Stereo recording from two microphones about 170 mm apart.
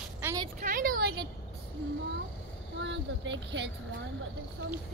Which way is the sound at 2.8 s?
90° right.